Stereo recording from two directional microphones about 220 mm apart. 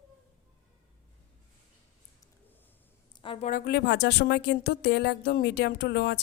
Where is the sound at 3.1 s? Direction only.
25° left (ahead or behind).